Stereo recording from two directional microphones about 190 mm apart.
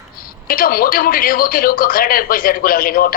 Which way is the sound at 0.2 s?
50° left (ahead or behind).